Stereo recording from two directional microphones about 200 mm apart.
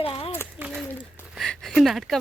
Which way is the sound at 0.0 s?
25° left (ahead or behind).